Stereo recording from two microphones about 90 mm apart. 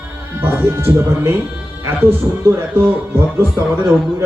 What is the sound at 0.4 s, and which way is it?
A man's voice, 25° right (ahead or behind).